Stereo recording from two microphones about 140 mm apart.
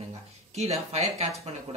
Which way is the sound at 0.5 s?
50° right (ahead or behind).